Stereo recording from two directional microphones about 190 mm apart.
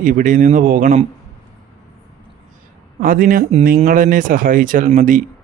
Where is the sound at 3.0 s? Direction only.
45° right (ahead or behind).